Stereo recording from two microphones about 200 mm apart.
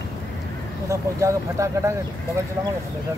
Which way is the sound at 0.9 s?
15° right (ahead or behind).